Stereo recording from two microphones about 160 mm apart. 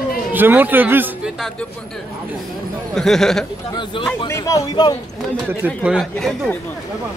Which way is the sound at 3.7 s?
30° left (ahead or behind).